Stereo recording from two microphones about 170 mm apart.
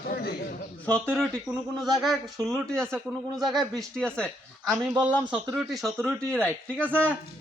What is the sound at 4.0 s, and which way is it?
Speech, 5° left (ahead or behind).